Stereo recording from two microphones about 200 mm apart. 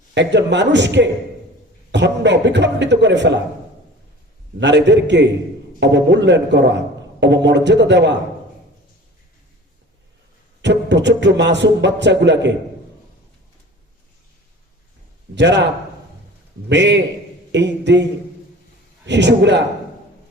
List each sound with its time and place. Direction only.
0.1 s music: 60° right (ahead or behind)
4.6 s music: 60° right (ahead or behind)
10.6 s music: 60° right (ahead or behind)
15.4 s music: 60° right (ahead or behind)
19.0 s music: 60° right (ahead or behind)